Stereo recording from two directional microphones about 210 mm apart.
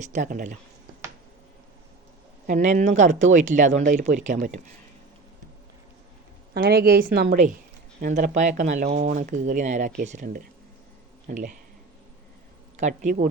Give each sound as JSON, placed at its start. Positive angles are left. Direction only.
{"t": 0.0, "sound": "speech", "side_deg": -35}
{"t": 2.5, "sound": "speech", "side_deg": -40}
{"t": 6.5, "sound": "a woman's voice", "side_deg": -50}
{"t": 8.0, "sound": "speech", "side_deg": -35}
{"t": 12.7, "sound": "speech", "side_deg": -35}